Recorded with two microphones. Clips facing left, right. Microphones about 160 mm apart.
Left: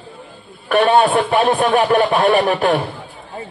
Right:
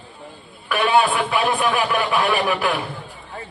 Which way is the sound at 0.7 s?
45° left (ahead or behind).